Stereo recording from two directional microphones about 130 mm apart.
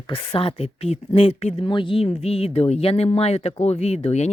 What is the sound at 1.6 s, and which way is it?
Speech, 40° left (ahead or behind).